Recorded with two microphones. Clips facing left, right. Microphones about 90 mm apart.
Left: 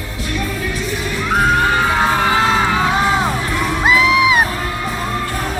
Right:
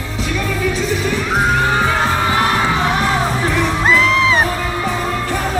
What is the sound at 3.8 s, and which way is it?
Music, 5° left (ahead or behind).